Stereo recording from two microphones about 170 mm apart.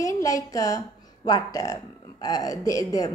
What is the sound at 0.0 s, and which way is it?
Speech, 20° left (ahead or behind).